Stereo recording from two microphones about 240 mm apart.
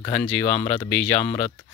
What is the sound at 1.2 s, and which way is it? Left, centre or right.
Speech, left.